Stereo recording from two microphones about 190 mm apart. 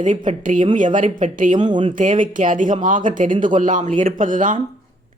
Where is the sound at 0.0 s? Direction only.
40° right (ahead or behind).